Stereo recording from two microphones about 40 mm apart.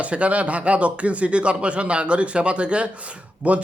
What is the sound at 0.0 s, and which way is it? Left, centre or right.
Speech, right.